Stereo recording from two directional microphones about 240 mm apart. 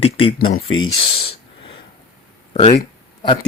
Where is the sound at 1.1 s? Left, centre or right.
Left.